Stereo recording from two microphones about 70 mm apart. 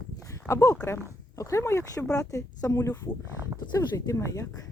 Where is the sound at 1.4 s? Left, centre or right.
Left.